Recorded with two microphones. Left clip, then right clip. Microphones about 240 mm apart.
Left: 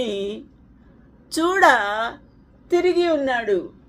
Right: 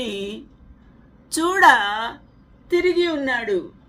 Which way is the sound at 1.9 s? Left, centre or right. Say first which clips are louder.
Left 1 dB; right.